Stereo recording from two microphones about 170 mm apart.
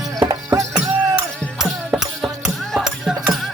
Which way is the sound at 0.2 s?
20° right (ahead or behind).